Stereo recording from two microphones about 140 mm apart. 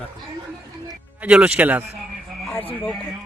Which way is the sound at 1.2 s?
10° right (ahead or behind).